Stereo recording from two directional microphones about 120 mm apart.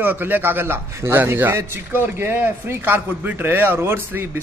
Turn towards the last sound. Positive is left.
turn(degrees=-20)  # may be behind; listen again after turning